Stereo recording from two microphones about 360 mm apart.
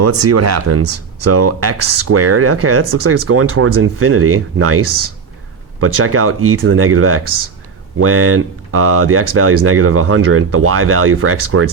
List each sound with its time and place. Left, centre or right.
0.0 s speech: right